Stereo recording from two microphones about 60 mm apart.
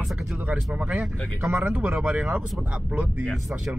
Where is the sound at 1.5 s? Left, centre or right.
Right.